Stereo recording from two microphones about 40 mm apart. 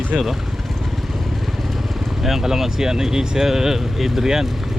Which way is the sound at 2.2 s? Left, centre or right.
Centre.